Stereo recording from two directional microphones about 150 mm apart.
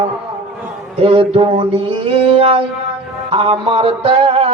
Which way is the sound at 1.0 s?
40° right (ahead or behind).